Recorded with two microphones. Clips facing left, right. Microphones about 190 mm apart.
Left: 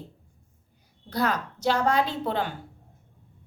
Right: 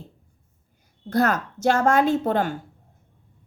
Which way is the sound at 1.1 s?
45° right (ahead or behind).